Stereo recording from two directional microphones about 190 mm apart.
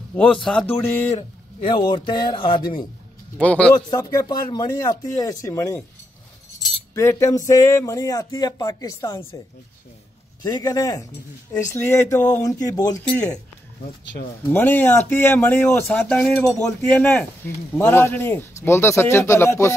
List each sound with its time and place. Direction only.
0.1 s speech: 5° left (ahead or behind)
1.1 s a man's voice: 25° left (ahead or behind)
3.3 s speech: 5° left (ahead or behind)
3.7 s speech: 20° left (ahead or behind)
7.0 s speech: 15° left (ahead or behind)
10.4 s a man's voice: 20° left (ahead or behind)
13.0 s speech: 5° left (ahead or behind)
14.5 s speech: 10° left (ahead or behind)